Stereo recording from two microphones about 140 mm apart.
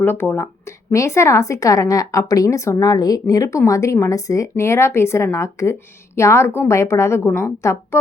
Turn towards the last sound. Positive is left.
turn(degrees=20)  # may be behind; listen again after turning